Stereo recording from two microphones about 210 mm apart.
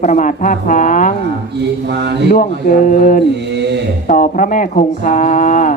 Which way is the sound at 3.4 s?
55° right (ahead or behind).